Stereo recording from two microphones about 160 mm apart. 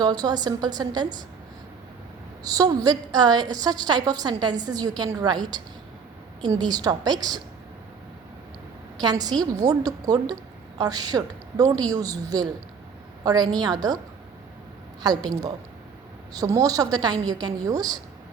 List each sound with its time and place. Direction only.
0.0 s a woman's voice: 25° right (ahead or behind)
2.4 s a woman's voice: 25° right (ahead or behind)
9.0 s a woman's voice: 25° right (ahead or behind)
15.0 s a woman's voice: 25° right (ahead or behind)